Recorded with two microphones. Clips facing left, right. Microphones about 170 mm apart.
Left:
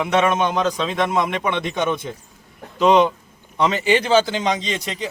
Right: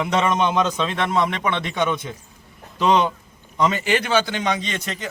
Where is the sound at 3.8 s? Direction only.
15° left (ahead or behind).